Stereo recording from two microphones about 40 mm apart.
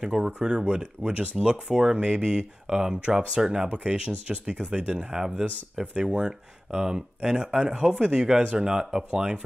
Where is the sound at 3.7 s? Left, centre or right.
Right.